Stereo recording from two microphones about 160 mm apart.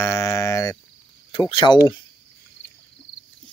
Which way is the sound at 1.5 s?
30° left (ahead or behind).